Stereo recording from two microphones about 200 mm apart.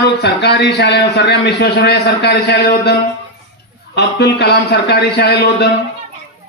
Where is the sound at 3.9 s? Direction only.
55° left (ahead or behind).